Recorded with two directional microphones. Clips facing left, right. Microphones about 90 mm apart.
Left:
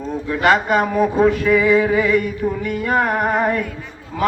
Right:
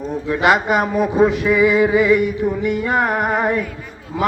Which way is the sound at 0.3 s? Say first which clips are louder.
Even; 15° right (ahead or behind).